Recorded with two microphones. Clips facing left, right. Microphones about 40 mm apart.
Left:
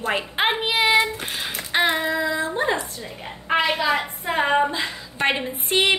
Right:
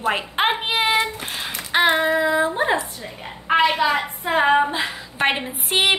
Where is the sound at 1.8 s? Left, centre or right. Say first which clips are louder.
Right 4 dB; right.